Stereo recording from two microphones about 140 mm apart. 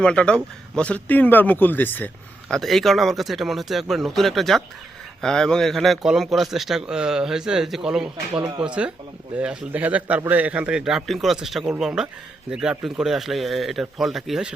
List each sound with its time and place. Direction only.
0.0 s speech: 5° left (ahead or behind)
2.5 s a man's voice: centre (ahead or behind)
8.4 s speech: 35° right (ahead or behind)
8.6 s a man's voice: 5° right (ahead or behind)